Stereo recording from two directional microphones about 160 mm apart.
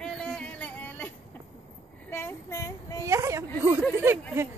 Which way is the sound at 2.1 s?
15° left (ahead or behind).